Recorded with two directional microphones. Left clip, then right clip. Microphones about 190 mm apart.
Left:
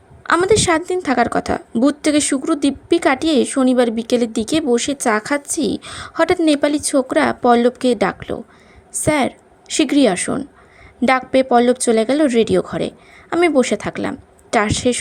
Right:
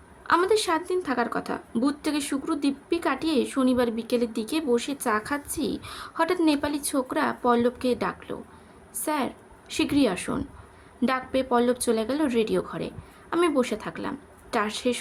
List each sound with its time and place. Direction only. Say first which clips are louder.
0.3 s a woman's voice: left 8 dB; 30° left (ahead or behind)